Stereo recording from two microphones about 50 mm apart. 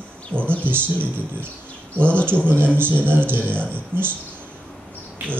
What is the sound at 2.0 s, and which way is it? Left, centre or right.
A man's voice, right.